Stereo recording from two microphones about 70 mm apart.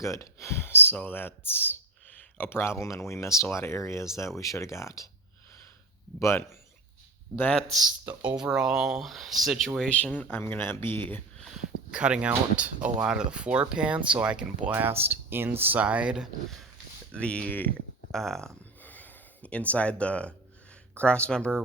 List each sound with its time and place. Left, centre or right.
0.0 s speech: left
2.0 s clicking: left
2.7 s speech: left
6.1 s speech: left
8.0 s speech: right
8.4 s speech: centre
9.9 s speech: centre
11.9 s speech: centre
17.1 s speech: centre
18.1 s speech: centre
18.8 s gasp: left
20.9 s speech: centre